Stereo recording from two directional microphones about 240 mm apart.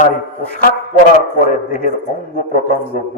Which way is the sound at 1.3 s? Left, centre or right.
Left.